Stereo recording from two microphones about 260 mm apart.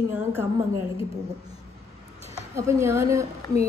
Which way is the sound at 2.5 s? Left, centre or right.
Centre.